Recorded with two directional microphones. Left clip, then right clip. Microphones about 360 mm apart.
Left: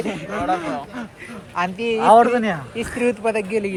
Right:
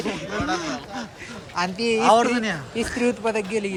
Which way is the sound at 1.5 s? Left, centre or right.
Centre.